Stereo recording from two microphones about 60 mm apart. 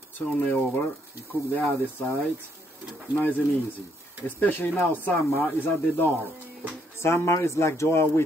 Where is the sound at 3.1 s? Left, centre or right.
Left.